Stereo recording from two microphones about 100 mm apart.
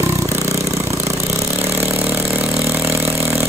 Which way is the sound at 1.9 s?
15° right (ahead or behind).